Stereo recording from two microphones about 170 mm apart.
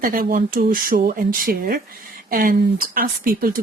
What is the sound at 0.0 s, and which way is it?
Speech, 55° right (ahead or behind).